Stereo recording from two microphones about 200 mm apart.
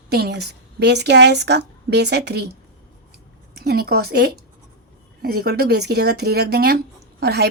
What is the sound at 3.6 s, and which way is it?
A woman's voice, 50° right (ahead or behind).